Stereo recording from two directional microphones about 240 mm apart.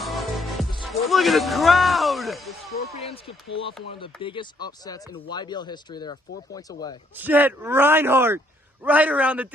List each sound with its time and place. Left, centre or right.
0.0 s music: centre
0.8 s speech: centre
3.0 s speech: left
7.2 s speech: centre